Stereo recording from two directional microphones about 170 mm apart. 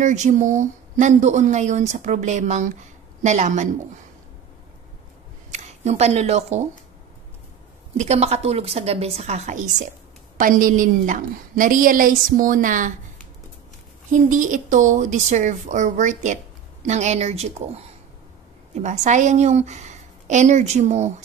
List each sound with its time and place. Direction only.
0.0 s speech: 45° right (ahead or behind)
5.5 s speech: 40° right (ahead or behind)
8.0 s a woman's voice: 40° right (ahead or behind)
10.3 s speech: 50° right (ahead or behind)
14.1 s a woman's voice: 50° right (ahead or behind)